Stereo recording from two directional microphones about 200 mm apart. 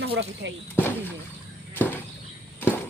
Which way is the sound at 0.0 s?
60° right (ahead or behind).